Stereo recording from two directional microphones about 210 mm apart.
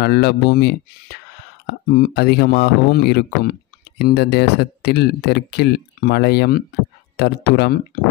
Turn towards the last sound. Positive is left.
turn(degrees=50)  # may be behind; listen again after turning